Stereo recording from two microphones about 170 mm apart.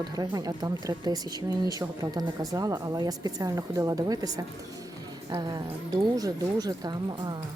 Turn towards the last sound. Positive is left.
turn(degrees=-25)  # may be behind; listen again after turning